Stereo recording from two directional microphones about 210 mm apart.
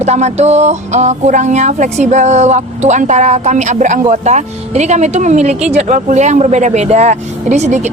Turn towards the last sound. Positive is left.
turn(degrees=-35)  # may be behind; listen again after turning